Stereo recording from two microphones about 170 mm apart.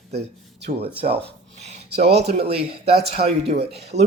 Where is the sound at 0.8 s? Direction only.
35° right (ahead or behind).